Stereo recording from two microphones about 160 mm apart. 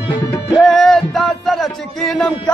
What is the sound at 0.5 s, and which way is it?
Music, centre (ahead or behind).